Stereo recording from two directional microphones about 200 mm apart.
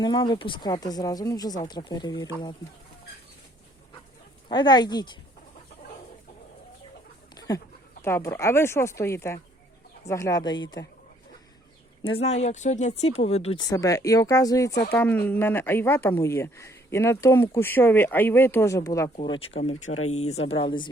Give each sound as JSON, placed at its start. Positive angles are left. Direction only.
{"t": 0.0, "sound": "speech", "side_deg": 20}
{"t": 4.4, "sound": "speech", "side_deg": 20}
{"t": 7.3, "sound": "chicken", "side_deg": 20}
{"t": 8.0, "sound": "speech", "side_deg": 15}
{"t": 12.0, "sound": "speech", "side_deg": 30}
{"t": 13.7, "sound": "speech", "side_deg": 15}
{"t": 19.9, "sound": "speech", "side_deg": 90}
{"t": 20.1, "sound": "speech", "side_deg": 35}